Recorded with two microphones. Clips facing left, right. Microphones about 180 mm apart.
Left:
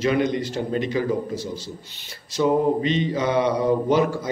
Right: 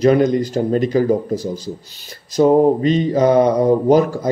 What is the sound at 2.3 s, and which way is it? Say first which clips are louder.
Mantra: right 7 dB; 40° right (ahead or behind).